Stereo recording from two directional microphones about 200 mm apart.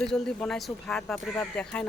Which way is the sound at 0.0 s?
5° left (ahead or behind).